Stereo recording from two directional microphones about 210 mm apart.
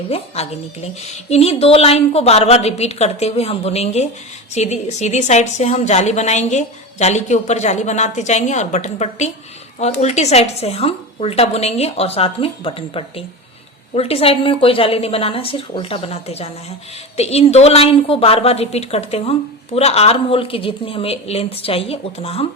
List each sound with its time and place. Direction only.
0.1 s a woman's voice: 30° left (ahead or behind)